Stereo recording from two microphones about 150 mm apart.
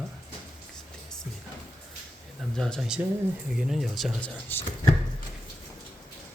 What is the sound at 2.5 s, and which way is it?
Speech, 5° left (ahead or behind).